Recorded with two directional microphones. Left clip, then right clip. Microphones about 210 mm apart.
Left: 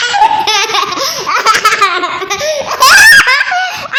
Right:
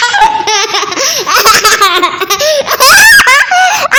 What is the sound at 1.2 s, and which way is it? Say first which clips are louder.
Laughter: right 3 dB; 50° right (ahead or behind).